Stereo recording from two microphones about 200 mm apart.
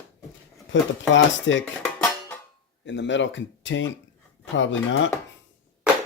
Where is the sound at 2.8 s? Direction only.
65° left (ahead or behind).